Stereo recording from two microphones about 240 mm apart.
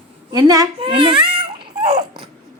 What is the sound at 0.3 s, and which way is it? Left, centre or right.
Babbling, centre.